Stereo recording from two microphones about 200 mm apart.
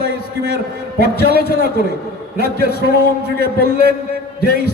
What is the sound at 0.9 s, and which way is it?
A man's voice, 50° left (ahead or behind).